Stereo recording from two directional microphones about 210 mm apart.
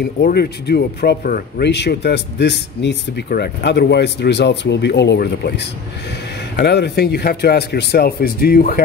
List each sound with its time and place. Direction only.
0.0 s speech: 45° left (ahead or behind)